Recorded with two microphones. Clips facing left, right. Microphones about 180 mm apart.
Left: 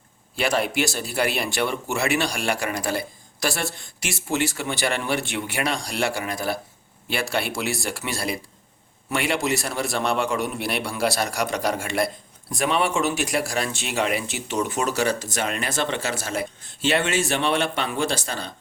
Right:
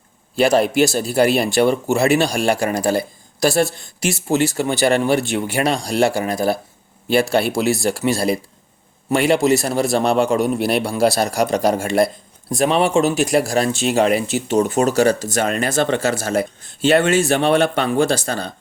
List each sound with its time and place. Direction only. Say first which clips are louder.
0.3 s speech: right 9 dB; 40° right (ahead or behind)